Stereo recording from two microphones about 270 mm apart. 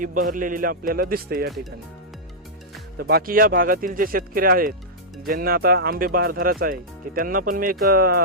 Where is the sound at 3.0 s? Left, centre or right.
Right.